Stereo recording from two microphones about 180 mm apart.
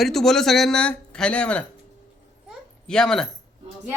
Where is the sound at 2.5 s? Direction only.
5° left (ahead or behind).